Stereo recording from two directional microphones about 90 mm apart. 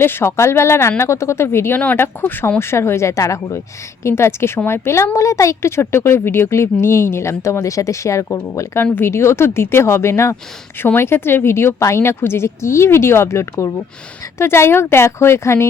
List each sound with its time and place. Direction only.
0.0 s a woman's voice: 25° left (ahead or behind)